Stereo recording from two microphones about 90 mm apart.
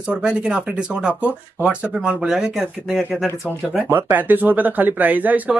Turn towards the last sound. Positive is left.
turn(degrees=-20)  # may be behind; listen again after turning